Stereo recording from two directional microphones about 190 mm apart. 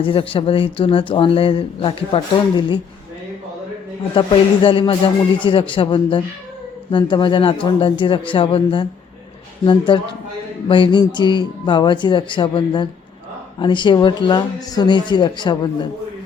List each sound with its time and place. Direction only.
0.0 s speech: 30° left (ahead or behind)
4.1 s speech: 25° left (ahead or behind)